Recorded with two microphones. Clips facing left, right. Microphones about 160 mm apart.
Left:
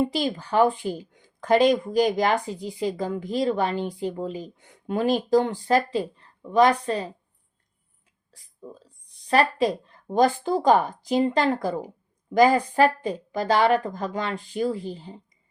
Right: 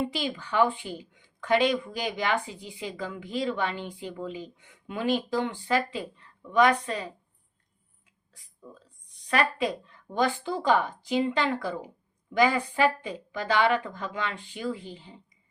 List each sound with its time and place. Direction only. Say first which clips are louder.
0.0 s a woman's voice: left 6 dB; 40° left (ahead or behind)
8.3 s a woman's voice: left 6 dB; 35° left (ahead or behind)